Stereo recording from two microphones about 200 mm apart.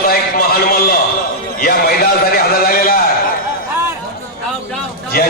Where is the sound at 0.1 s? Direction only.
50° left (ahead or behind).